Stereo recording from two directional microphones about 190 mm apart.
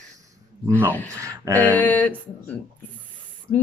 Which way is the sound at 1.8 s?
10° left (ahead or behind).